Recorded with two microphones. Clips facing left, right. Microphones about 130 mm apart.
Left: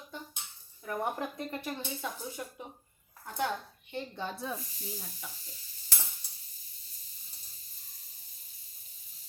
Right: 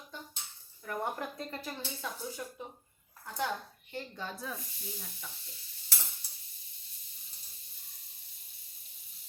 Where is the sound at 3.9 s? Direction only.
20° left (ahead or behind).